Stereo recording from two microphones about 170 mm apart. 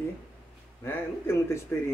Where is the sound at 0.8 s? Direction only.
15° left (ahead or behind).